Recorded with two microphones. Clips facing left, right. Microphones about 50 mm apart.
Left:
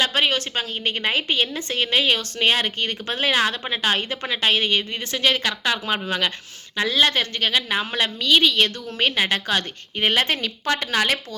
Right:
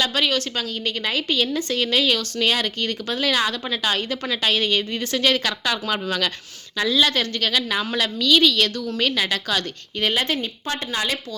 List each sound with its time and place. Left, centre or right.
0.0 s speech: left
6.8 s speech: left
7.1 s speech: centre
10.1 s speech: left
10.4 s a woman's voice: left